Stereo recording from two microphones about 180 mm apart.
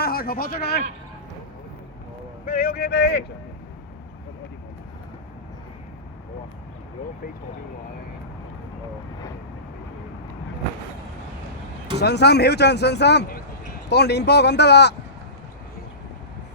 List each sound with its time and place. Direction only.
0.0 s speech: 55° left (ahead or behind)
2.5 s speech: 50° left (ahead or behind); by 3.2 s 70° left (ahead or behind)
11.9 s speech: 65° left (ahead or behind)